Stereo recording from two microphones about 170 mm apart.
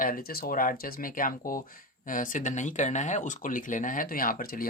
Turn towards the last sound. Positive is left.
turn(degrees=55)  # may be behind; listen again after turning